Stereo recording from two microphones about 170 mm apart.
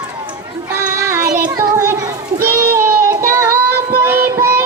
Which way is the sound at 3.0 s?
20° right (ahead or behind).